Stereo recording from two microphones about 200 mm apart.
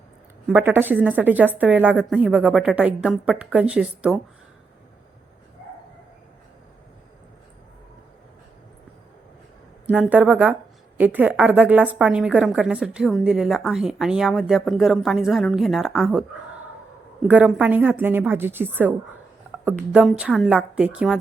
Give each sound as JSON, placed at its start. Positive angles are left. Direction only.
{"t": 0.4, "sound": "a woman's voice", "side_deg": -10}
{"t": 9.8, "sound": "a woman's voice", "side_deg": -5}
{"t": 17.2, "sound": "a woman's voice", "side_deg": -5}